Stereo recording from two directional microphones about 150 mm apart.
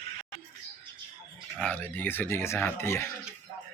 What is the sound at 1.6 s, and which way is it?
Speech, 10° left (ahead or behind).